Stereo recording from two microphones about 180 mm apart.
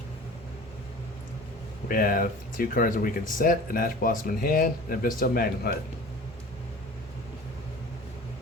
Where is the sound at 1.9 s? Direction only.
50° left (ahead or behind).